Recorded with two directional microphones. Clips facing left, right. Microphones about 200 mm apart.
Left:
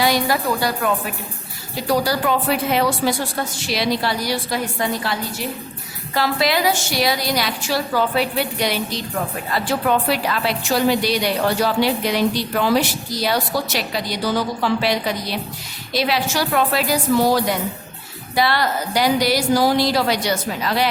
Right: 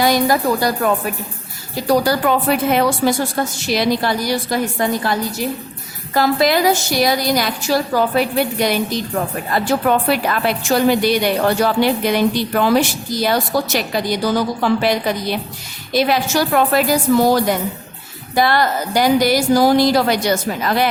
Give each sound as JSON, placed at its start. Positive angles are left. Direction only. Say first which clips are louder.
{"t": 0.0, "sound": "a woman's voice", "louder": "right 4 dB", "side_deg": -45}
{"t": 6.1, "sound": "a woman's voice", "louder": "right 5 dB", "side_deg": -45}